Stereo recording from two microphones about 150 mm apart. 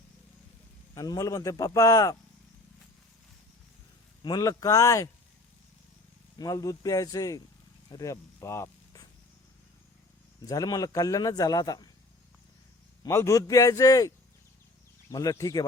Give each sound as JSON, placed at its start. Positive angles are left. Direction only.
{"t": 0.9, "sound": "speech", "side_deg": 25}
{"t": 4.2, "sound": "speech", "side_deg": 25}
{"t": 6.3, "sound": "speech", "side_deg": 25}
{"t": 10.4, "sound": "speech", "side_deg": 25}
{"t": 13.0, "sound": "speech", "side_deg": 20}
{"t": 15.1, "sound": "speech", "side_deg": 25}